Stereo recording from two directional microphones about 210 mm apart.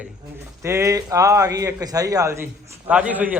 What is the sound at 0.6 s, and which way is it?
A man's voice, 15° right (ahead or behind).